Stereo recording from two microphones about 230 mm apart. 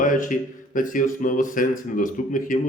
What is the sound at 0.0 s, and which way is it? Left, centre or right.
A man's voice, left.